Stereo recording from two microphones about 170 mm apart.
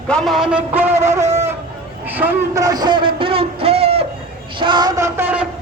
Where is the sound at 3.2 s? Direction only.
35° right (ahead or behind).